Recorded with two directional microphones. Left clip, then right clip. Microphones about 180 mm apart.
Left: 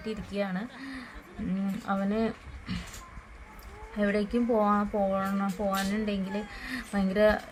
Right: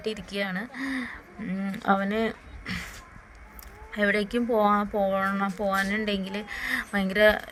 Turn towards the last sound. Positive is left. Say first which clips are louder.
# right 3 dB
turn(degrees=-50)  # may be behind; listen again after turning